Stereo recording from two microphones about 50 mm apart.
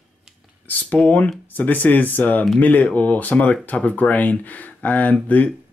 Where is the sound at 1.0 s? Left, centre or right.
Left.